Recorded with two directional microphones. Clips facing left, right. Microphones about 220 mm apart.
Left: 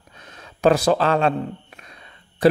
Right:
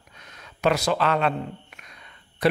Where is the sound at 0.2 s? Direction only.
30° left (ahead or behind).